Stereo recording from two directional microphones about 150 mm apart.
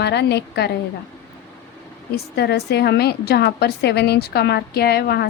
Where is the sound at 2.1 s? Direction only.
90° left.